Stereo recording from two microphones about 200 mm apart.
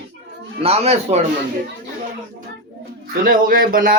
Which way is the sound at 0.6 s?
30° right (ahead or behind).